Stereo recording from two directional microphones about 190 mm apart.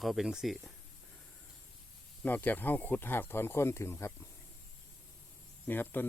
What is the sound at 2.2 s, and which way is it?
Speech, 10° left (ahead or behind).